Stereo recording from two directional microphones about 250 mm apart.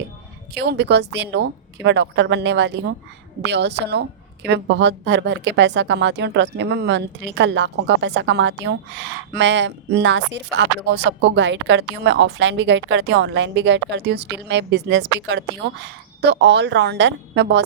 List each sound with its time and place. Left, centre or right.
0.5 s speech: right